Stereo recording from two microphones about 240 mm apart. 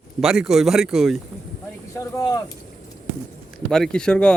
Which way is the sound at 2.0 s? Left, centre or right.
Centre.